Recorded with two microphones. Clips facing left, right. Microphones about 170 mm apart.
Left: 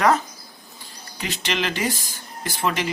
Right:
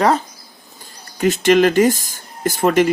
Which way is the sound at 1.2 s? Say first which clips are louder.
Right 14 dB; 50° right (ahead or behind).